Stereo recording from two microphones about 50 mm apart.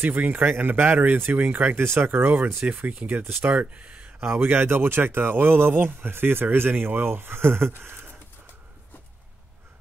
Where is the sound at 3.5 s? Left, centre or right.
Right.